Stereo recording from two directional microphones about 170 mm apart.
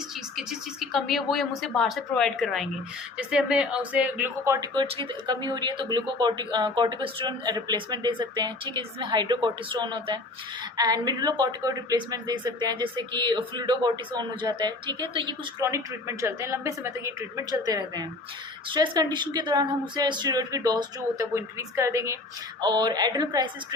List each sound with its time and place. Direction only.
0.9 s a woman's voice: centre (ahead or behind); by 15.4 s 30° right (ahead or behind)
15.6 s a woman's voice: 15° right (ahead or behind)